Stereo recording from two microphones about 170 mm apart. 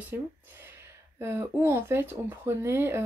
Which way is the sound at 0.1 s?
10° right (ahead or behind).